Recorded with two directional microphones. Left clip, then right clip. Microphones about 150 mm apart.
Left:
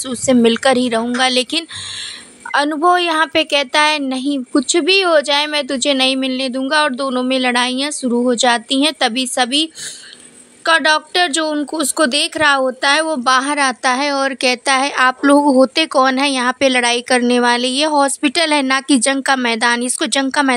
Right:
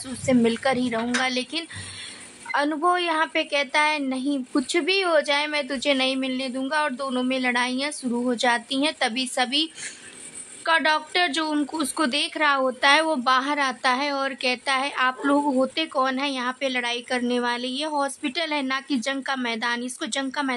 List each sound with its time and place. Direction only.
0.3 s a woman's voice: 40° left (ahead or behind)
12.6 s a woman's voice: 25° left (ahead or behind); by 20.5 s 45° left (ahead or behind)